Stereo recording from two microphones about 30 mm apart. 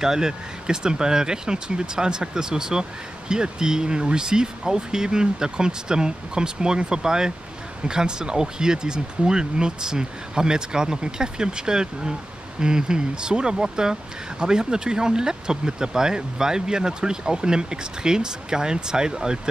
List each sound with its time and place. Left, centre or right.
0.0 s speech: centre